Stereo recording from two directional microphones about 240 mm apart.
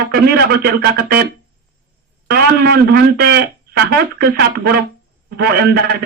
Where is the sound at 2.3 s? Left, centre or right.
Right.